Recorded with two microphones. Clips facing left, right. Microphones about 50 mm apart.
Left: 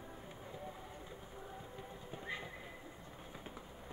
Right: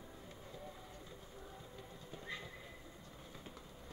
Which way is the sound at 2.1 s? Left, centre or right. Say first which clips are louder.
Left 3 dB; left.